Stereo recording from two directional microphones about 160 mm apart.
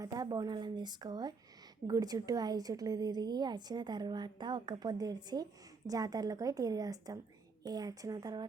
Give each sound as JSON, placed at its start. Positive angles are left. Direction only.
{"t": 0.0, "sound": "a woman's voice", "side_deg": -25}